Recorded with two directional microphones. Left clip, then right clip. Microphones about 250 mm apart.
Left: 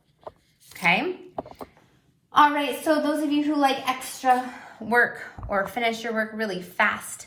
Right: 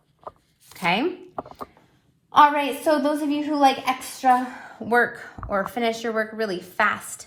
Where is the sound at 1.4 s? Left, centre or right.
Centre.